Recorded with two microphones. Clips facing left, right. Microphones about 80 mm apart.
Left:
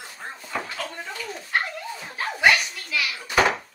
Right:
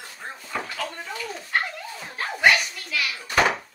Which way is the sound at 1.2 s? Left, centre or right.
Centre.